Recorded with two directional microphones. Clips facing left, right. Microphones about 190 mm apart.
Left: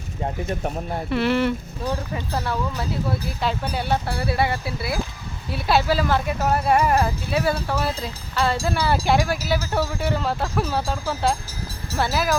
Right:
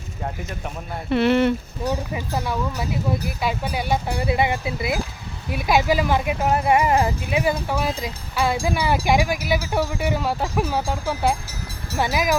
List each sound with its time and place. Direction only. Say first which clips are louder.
1.1 s speech: right 4 dB; 20° right (ahead or behind)